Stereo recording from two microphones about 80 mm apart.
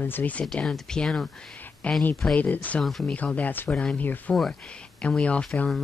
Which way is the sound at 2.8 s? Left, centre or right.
Centre.